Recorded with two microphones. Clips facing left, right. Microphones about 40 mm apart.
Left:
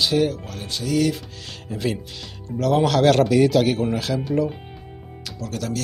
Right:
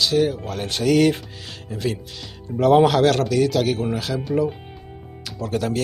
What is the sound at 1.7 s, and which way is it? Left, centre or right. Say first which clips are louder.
Speech: even; centre.